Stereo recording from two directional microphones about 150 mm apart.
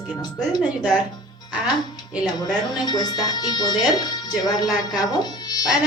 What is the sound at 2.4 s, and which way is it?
Speech, 25° left (ahead or behind).